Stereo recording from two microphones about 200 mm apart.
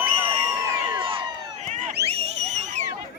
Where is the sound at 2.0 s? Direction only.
30° right (ahead or behind).